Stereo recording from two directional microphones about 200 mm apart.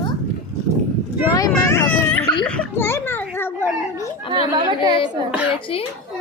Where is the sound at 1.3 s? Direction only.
10° left (ahead or behind).